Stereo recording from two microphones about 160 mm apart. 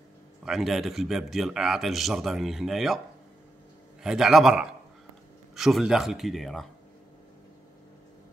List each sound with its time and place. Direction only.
0.5 s a man's voice: centre (ahead or behind)
4.0 s a man's voice: 5° right (ahead or behind)